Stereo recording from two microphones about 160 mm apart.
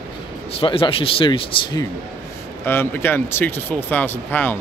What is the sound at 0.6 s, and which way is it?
Speech, 35° left (ahead or behind).